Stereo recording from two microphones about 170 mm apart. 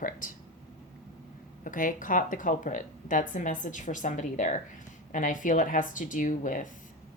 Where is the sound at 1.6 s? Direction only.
50° left (ahead or behind).